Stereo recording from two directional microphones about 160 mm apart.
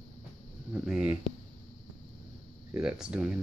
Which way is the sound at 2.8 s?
5° right (ahead or behind).